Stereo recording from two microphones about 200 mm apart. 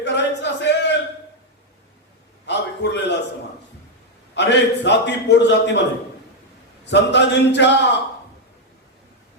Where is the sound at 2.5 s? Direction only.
60° left (ahead or behind).